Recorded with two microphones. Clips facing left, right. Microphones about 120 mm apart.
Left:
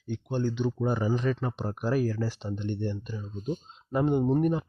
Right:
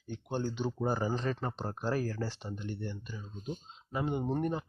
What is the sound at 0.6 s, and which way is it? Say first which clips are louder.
Speech: left 4 dB; 35° right (ahead or behind).